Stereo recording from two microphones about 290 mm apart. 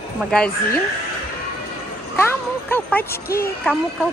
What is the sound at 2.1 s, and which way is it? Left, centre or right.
A child's voice, centre.